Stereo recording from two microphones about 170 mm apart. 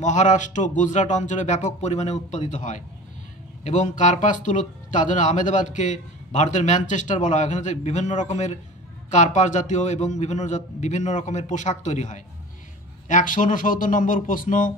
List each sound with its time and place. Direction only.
0.0 s a man's voice: 45° left (ahead or behind)